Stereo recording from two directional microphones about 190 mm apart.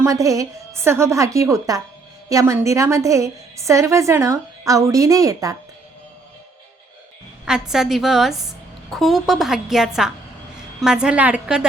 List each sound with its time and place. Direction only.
0.0 s a woman's voice: 15° right (ahead or behind)
7.4 s a woman's voice: 5° right (ahead or behind)